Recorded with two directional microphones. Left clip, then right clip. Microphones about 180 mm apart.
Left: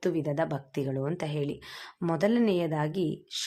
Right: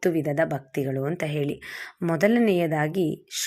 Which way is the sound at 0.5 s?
5° right (ahead or behind).